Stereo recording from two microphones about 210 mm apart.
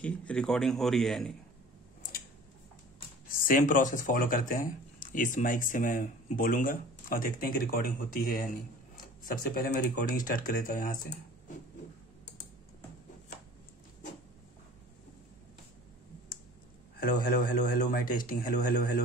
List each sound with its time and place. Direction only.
0.0 s a man's voice: 5° left (ahead or behind)
3.3 s speech: 40° left (ahead or behind)
17.1 s speech: 40° left (ahead or behind)